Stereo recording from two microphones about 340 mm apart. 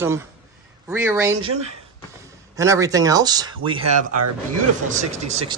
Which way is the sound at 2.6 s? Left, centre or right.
Centre.